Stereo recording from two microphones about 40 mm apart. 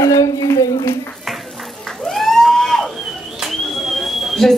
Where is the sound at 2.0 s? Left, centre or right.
Centre.